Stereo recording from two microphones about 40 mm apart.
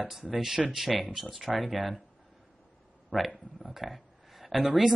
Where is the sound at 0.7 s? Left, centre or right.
Centre.